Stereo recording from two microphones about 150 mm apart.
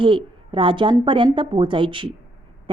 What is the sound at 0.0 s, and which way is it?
Speech, 35° right (ahead or behind).